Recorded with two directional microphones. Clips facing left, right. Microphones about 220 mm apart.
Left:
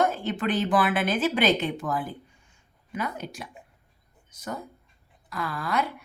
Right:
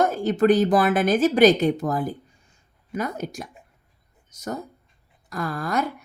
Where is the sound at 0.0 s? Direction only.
40° right (ahead or behind).